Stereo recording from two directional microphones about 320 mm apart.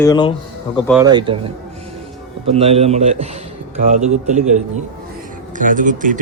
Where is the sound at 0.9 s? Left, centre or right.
Centre.